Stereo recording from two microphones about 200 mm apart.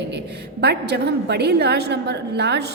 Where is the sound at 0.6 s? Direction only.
55° right (ahead or behind).